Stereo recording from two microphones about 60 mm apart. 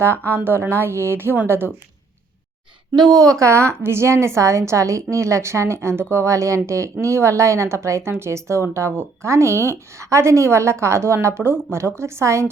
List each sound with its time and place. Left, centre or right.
0.3 s a woman's voice: right
3.1 s a woman's voice: right